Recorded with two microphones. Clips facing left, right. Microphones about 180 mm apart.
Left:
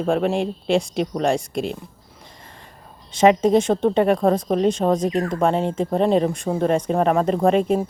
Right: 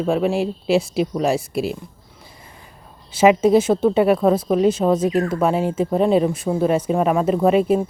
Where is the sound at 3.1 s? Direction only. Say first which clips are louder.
Right 1 dB; 5° right (ahead or behind).